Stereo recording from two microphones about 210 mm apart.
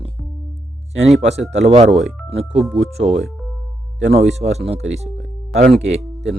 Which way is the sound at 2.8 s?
30° right (ahead or behind).